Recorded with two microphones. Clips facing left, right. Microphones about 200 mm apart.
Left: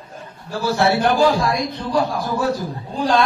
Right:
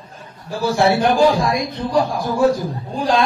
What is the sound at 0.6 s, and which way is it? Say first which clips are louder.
A man's voice: right 2 dB; 15° right (ahead or behind).